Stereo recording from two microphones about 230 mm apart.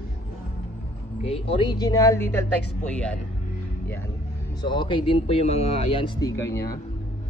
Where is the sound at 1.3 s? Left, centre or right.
Left; by 3.1 s centre.